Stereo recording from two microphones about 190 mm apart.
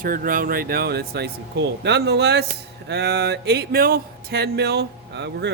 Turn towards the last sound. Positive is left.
turn(degrees=-65)  # may be behind; listen again after turning